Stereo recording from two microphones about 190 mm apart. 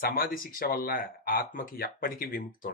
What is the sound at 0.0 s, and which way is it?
Speech, 50° left (ahead or behind).